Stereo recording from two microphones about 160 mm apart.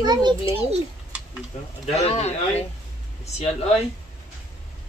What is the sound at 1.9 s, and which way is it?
Speech, 40° left (ahead or behind).